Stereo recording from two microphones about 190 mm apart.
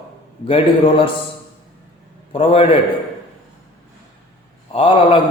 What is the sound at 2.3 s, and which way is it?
Speech, 30° left (ahead or behind).